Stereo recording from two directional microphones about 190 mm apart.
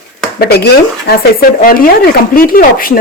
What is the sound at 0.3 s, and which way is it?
Speech, 55° left (ahead or behind).